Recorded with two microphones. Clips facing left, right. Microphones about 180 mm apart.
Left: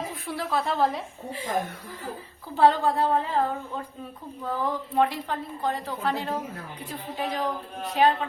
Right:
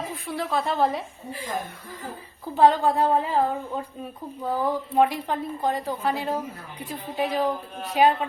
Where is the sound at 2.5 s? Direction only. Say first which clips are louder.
Right 2 dB; 15° right (ahead or behind).